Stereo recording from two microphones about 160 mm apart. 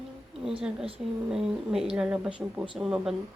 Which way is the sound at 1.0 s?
5° right (ahead or behind).